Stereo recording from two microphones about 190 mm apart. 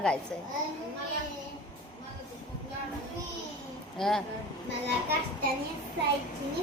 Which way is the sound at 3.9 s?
Centre (ahead or behind).